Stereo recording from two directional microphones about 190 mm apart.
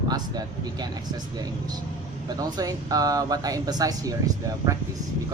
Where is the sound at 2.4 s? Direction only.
20° right (ahead or behind).